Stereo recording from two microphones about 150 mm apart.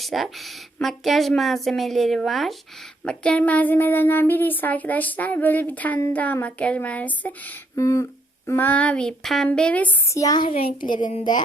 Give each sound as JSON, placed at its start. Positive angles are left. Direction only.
{"t": 0.0, "sound": "speech", "side_deg": 0}
{"t": 10.2, "sound": "a child's voice", "side_deg": 25}